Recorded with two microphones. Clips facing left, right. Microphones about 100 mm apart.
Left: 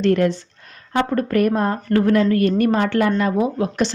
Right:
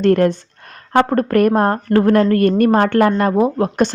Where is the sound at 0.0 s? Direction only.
50° right (ahead or behind).